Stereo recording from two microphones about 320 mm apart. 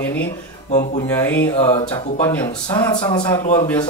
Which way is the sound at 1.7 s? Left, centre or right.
Centre.